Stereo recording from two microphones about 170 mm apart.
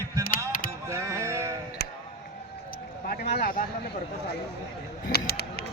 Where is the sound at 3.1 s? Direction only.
60° left (ahead or behind).